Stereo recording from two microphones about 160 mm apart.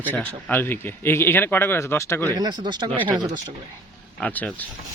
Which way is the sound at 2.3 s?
25° right (ahead or behind).